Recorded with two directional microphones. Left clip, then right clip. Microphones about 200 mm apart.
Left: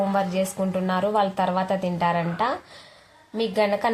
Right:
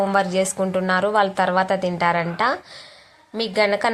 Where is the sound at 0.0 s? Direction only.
20° right (ahead or behind).